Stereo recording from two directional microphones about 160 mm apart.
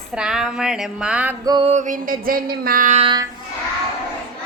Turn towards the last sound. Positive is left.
turn(degrees=-35)  # may be behind; listen again after turning